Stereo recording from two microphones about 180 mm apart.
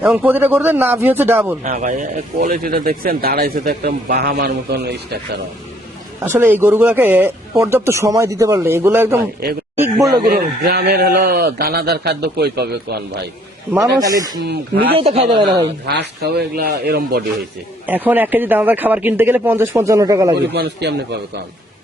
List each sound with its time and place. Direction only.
0.0 s speech: 10° right (ahead or behind)
1.6 s speech: 40° right (ahead or behind); by 5.2 s 60° right (ahead or behind)
6.2 s speech: 10° right (ahead or behind)
10.1 s speech: 60° right (ahead or behind)
13.8 s a man's voice: 20° right (ahead or behind)
14.4 s speech: 65° right (ahead or behind)
14.9 s speech: 35° right (ahead or behind)
15.6 s speech: 65° right (ahead or behind)
17.8 s speech: 10° right (ahead or behind)
20.5 s speech: 65° right (ahead or behind)